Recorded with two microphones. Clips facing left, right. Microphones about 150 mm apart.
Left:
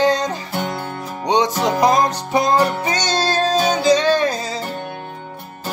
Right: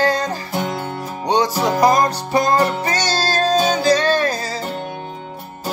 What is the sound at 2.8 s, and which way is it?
Music, 5° right (ahead or behind).